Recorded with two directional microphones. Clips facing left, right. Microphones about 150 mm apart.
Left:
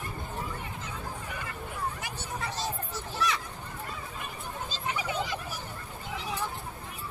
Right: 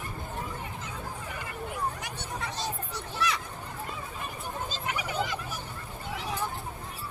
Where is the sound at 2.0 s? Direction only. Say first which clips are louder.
Even; centre (ahead or behind).